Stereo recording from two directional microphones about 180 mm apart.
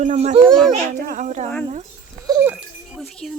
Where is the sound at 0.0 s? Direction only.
40° right (ahead or behind).